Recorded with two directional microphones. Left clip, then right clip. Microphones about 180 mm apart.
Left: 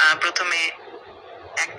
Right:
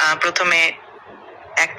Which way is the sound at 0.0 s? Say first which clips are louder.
Right 1 dB; 30° right (ahead or behind).